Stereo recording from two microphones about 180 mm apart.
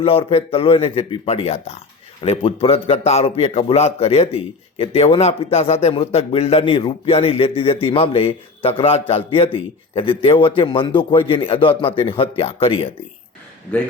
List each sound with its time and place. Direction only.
0.0 s a man's voice: 30° left (ahead or behind)